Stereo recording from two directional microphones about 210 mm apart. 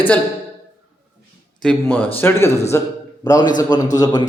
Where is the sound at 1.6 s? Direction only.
5° left (ahead or behind).